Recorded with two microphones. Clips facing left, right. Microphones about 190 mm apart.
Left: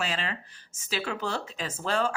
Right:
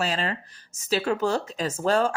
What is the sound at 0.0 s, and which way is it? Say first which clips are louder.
A woman's voice: right 5 dB; 40° right (ahead or behind).